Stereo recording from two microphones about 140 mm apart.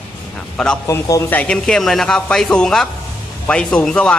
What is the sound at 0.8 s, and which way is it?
Speech, 20° left (ahead or behind).